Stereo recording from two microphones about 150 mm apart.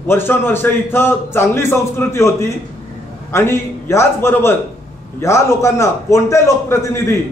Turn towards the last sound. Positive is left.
turn(degrees=15)  # may be behind; listen again after turning